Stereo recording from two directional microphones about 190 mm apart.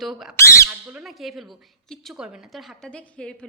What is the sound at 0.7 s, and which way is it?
Speech, 5° right (ahead or behind).